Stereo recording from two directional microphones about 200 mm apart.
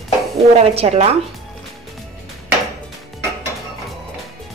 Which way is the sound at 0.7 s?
30° right (ahead or behind).